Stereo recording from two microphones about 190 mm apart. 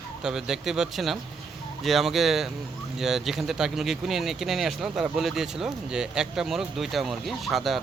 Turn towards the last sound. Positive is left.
turn(degrees=0)  # may be behind; listen again after turning